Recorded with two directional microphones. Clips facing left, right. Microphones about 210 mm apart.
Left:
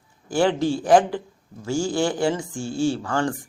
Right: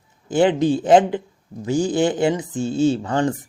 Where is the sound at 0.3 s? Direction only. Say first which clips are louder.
Right 4 dB; 20° right (ahead or behind).